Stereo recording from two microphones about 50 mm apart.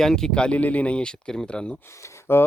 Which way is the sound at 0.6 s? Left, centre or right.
Left.